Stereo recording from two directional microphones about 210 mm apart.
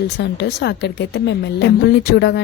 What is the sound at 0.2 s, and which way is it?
A woman's voice, 55° left (ahead or behind).